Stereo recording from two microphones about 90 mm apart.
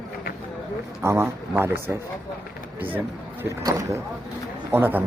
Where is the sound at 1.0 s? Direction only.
30° right (ahead or behind).